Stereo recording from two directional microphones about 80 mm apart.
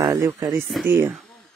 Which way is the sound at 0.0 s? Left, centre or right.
Right.